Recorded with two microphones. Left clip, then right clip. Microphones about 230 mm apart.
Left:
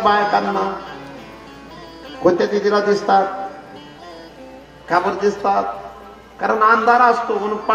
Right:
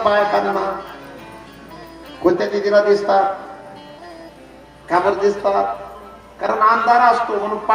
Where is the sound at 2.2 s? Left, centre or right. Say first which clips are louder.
Left 2 dB; left.